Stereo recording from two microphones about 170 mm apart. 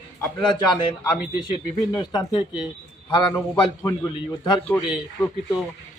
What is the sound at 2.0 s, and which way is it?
Speech, 20° left (ahead or behind).